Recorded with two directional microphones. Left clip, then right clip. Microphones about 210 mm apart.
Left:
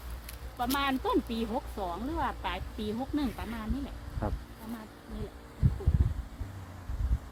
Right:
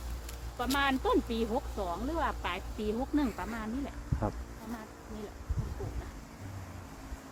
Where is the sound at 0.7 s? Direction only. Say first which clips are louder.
Right 1 dB; 55° left (ahead or behind).